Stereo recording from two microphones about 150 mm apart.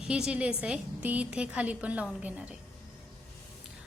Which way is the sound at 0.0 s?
5° right (ahead or behind).